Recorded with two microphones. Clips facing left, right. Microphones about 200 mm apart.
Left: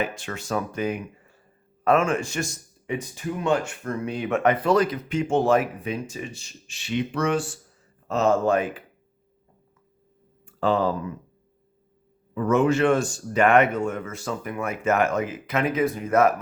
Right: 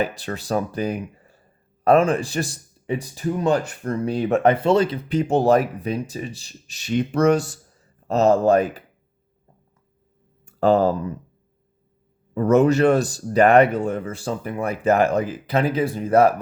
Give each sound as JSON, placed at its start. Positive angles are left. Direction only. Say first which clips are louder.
{"t": 0.0, "sound": "speech", "louder": "right 4 dB", "side_deg": -35}
{"t": 10.4, "sound": "speech", "louder": "right 5 dB", "side_deg": -40}
{"t": 12.3, "sound": "speech", "louder": "right 4 dB", "side_deg": -40}